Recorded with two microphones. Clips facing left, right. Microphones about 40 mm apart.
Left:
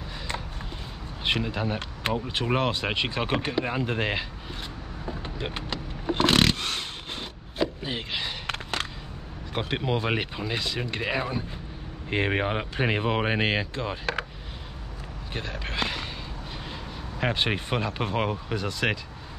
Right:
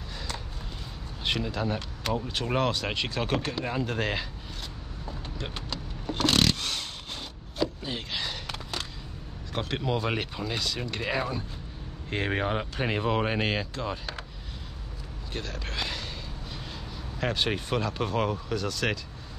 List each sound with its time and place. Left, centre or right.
1.2 s speech: left
5.0 s vehicle: left
9.5 s speech: left
15.3 s speech: left
17.2 s speech: left